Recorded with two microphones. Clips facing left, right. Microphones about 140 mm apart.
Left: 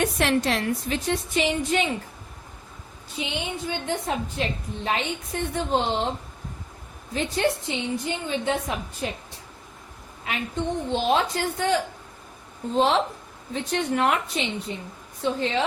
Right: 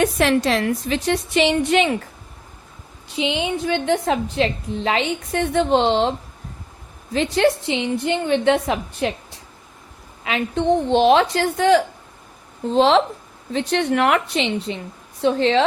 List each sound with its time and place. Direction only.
0.0 s a woman's voice: 90° right; by 2.0 s 70° right (ahead or behind)
3.2 s a woman's voice: 90° right
7.1 s a woman's voice: 90° right; by 9.1 s 70° right (ahead or behind)
10.2 s a woman's voice: 80° right
13.5 s a woman's voice: 80° right